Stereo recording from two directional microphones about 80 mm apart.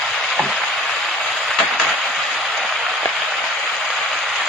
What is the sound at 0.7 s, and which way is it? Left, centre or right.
Train, centre.